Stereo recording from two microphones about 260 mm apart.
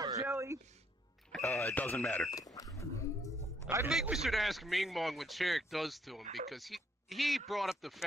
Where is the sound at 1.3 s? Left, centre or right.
Centre.